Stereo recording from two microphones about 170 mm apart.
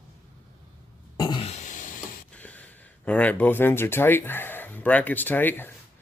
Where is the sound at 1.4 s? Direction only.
45° left (ahead or behind).